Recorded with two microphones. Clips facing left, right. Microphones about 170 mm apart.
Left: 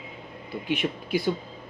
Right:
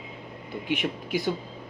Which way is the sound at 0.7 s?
15° right (ahead or behind).